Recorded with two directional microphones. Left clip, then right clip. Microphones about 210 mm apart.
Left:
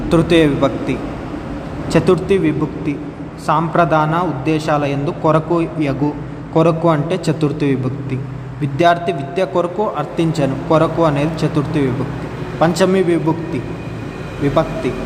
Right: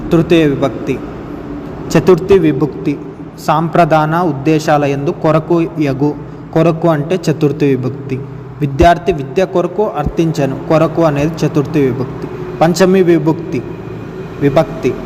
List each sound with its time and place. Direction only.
0.1 s a man's voice: 5° right (ahead or behind)